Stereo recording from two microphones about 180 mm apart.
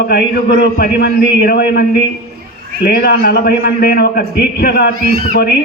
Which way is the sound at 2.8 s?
60° left (ahead or behind).